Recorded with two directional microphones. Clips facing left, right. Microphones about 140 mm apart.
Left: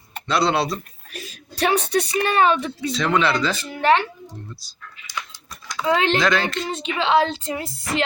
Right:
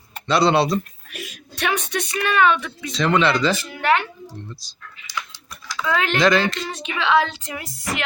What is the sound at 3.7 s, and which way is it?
Child singing, 30° left (ahead or behind).